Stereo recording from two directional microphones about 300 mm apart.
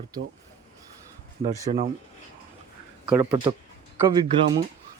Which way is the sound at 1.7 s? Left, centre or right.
Right.